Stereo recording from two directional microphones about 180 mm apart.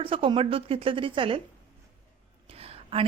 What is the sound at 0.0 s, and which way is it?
A woman's voice, 30° right (ahead or behind).